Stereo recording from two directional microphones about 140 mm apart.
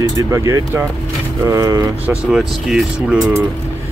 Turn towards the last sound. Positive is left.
turn(degrees=-5)  # may be behind; listen again after turning